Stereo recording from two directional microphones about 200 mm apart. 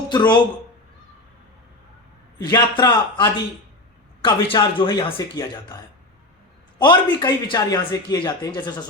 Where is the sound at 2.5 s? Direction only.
20° left (ahead or behind).